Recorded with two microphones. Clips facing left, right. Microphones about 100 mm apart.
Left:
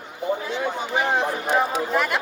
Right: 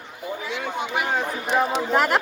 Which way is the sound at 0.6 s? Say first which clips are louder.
Left 2 dB; 30° left (ahead or behind).